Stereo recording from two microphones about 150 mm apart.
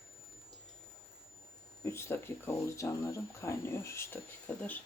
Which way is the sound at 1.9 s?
15° left (ahead or behind).